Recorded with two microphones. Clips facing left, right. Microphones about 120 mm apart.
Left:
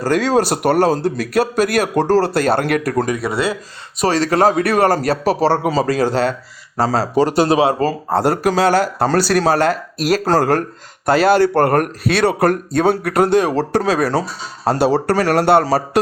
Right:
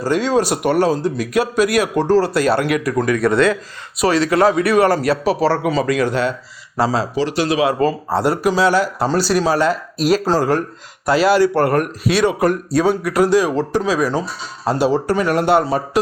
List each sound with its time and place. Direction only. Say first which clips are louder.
0.5 s speech: left 1 dB; 40° left (ahead or behind)
1.6 s a man's voice: even; 50° left (ahead or behind)
2.4 s a man's voice: even; 50° left (ahead or behind)
3.2 s speech: right 5 dB; 5° left (ahead or behind)
4.0 s speech: even; 40° left (ahead or behind)
6.7 s a man's voice: left 2 dB; 45° left (ahead or behind); by 16.0 s 70° left (ahead or behind)